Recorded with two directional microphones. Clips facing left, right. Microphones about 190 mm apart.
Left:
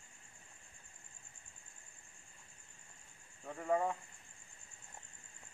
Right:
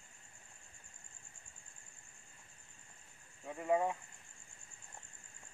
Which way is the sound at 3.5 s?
10° right (ahead or behind).